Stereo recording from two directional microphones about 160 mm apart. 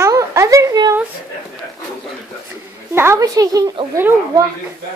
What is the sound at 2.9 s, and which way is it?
A woman's voice, 15° right (ahead or behind).